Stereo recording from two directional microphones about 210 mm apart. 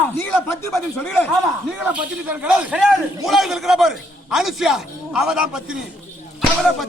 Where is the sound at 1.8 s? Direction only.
5° right (ahead or behind).